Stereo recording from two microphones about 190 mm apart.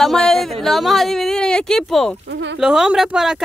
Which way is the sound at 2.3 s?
70° right (ahead or behind).